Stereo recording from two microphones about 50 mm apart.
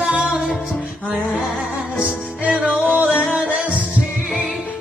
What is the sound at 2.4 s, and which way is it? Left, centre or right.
Music, centre.